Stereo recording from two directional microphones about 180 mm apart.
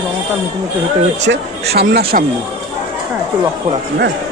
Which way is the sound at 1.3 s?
60° right (ahead or behind).